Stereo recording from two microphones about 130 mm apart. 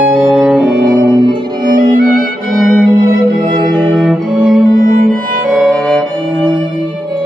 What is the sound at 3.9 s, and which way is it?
Music, centre (ahead or behind).